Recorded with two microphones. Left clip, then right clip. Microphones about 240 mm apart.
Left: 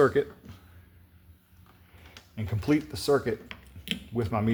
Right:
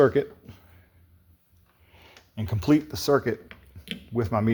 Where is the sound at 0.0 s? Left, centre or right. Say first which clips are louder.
Right 3 dB; right.